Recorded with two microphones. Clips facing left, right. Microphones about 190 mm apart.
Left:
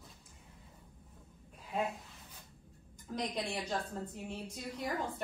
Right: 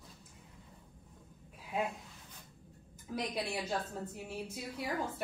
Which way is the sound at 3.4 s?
5° right (ahead or behind).